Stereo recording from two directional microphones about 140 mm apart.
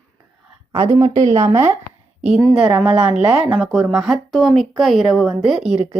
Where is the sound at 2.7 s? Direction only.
10° right (ahead or behind).